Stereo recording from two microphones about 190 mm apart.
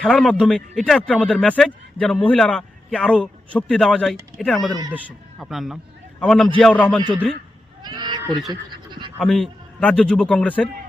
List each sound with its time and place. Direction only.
0.0 s a man's voice: centre (ahead or behind)
7.8 s sheep: 20° right (ahead or behind)
8.7 s a sound: 25° right (ahead or behind)
9.1 s speech: centre (ahead or behind)